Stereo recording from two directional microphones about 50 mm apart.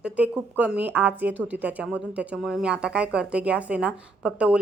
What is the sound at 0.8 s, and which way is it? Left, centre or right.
A woman's voice, right.